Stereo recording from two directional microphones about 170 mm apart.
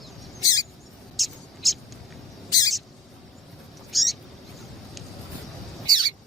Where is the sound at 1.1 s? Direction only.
Centre (ahead or behind).